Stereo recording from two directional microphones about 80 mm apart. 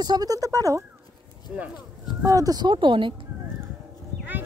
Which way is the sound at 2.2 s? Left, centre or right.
Right.